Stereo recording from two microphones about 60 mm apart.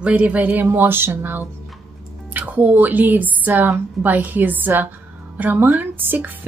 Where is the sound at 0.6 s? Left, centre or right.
Right.